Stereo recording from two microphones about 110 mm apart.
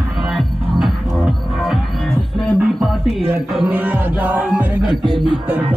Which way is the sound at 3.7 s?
15° right (ahead or behind).